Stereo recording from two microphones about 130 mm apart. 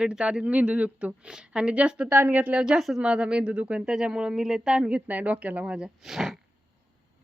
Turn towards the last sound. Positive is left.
turn(degrees=0)  # may be behind; listen again after turning